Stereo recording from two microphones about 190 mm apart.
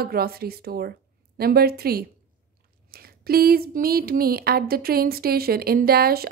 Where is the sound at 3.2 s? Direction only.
55° right (ahead or behind).